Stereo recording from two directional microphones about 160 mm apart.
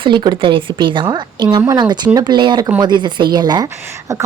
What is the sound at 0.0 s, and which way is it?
A woman's voice, 30° right (ahead or behind).